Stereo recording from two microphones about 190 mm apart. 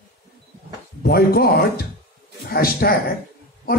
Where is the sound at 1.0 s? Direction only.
55° left (ahead or behind).